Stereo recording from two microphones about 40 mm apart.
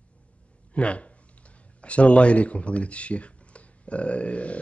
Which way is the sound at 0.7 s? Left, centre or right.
Left.